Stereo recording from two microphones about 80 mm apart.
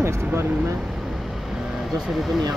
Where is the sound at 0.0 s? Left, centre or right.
Right.